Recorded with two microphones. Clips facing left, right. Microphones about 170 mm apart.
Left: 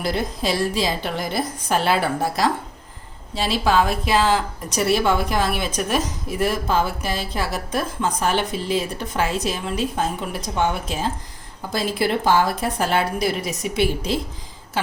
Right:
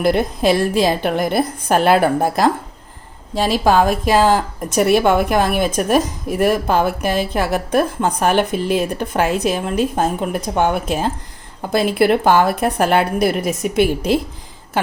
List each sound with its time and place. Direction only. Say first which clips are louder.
0.0 s a woman's voice: right 8 dB; 55° right (ahead or behind)